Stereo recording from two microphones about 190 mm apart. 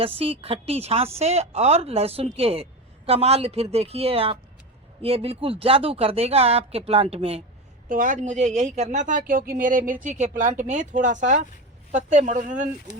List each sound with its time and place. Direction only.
0.0 s a woman's voice: 30° right (ahead or behind)
7.9 s a woman's voice: 45° right (ahead or behind)